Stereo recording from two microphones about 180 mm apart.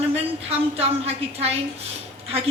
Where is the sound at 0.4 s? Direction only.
35° right (ahead or behind).